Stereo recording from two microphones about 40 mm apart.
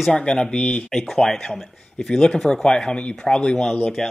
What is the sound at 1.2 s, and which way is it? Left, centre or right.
Speech, centre.